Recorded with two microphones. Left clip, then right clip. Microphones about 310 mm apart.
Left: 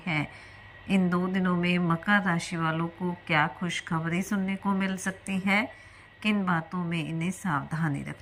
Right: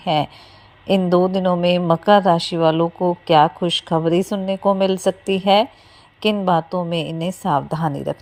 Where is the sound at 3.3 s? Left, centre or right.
Right.